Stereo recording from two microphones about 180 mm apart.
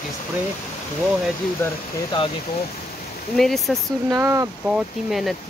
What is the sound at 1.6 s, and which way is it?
Speech, 10° left (ahead or behind).